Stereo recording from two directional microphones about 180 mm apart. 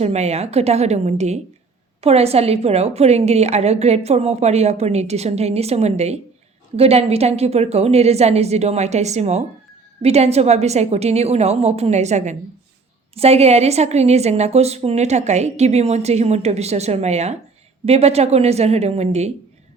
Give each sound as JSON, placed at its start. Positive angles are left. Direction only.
{"t": 0.0, "sound": "a woman's voice", "side_deg": -35}